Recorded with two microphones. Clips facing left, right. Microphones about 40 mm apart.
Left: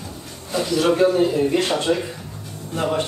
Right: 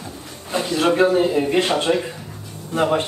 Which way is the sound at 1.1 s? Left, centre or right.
Centre.